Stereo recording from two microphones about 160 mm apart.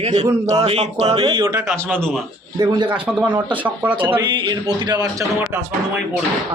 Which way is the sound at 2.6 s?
25° right (ahead or behind).